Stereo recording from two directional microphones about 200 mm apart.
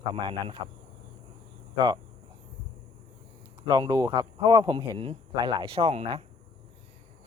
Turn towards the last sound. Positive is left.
turn(degrees=-30)  # may be behind; listen again after turning